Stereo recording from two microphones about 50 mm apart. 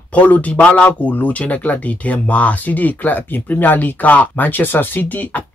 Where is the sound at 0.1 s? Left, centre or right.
Left.